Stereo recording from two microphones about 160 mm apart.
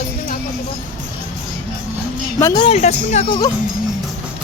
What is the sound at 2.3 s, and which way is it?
Speech, 20° left (ahead or behind).